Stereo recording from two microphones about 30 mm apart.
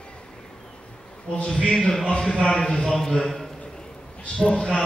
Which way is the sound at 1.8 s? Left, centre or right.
Centre.